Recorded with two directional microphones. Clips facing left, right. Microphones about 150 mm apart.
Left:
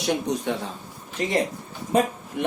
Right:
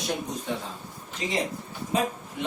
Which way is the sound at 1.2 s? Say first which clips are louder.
Left 5 dB; 50° left (ahead or behind).